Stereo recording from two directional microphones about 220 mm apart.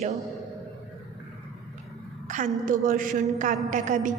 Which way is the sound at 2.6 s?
35° right (ahead or behind).